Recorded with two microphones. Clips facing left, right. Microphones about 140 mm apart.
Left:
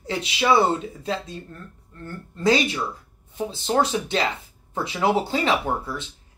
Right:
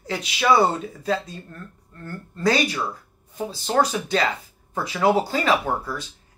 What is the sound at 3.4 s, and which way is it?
Speech, 25° left (ahead or behind).